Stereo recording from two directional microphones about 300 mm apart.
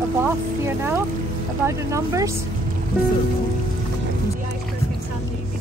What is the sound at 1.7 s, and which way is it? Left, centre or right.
Speech, centre.